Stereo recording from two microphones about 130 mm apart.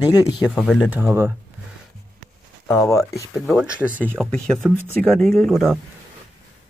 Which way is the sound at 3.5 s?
10° right (ahead or behind).